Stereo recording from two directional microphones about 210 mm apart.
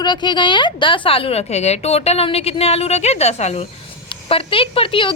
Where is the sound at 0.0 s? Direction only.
20° left (ahead or behind).